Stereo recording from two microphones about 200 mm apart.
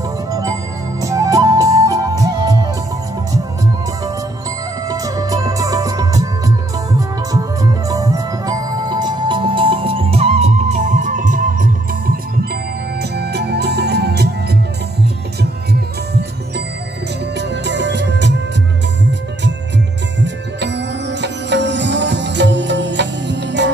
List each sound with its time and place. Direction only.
0.3 s music: 15° right (ahead or behind)
4.8 s music: 15° right (ahead or behind)
7.9 s music: 15° right (ahead or behind); by 12.2 s 45° right (ahead or behind)
13.1 s music: 55° right (ahead or behind)
17.4 s music: 60° right (ahead or behind)
20.2 s music: 60° right (ahead or behind)